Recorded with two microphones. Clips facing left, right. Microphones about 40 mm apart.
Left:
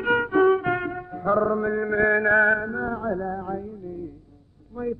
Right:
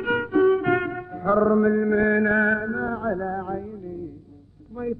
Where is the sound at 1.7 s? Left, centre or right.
Centre.